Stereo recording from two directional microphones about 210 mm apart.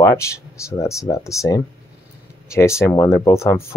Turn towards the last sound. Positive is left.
turn(degrees=15)  # may be behind; listen again after turning